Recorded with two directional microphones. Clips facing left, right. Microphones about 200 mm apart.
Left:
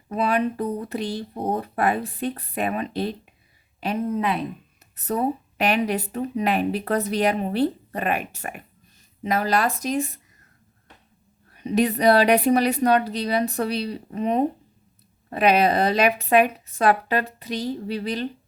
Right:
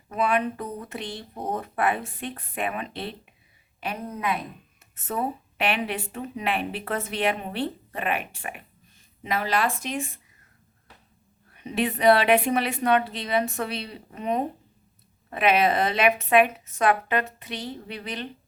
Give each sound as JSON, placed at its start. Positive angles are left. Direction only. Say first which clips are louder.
{"t": 0.1, "sound": "speech", "louder": "left 2 dB", "side_deg": 35}
{"t": 11.5, "sound": "speech", "louder": "left 6 dB", "side_deg": 40}